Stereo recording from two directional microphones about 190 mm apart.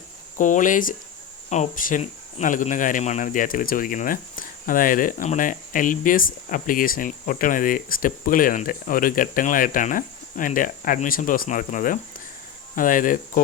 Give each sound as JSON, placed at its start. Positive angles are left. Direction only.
{"t": 0.3, "sound": "speech", "side_deg": 45}